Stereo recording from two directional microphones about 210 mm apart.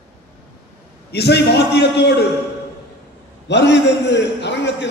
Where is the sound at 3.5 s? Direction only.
55° left (ahead or behind).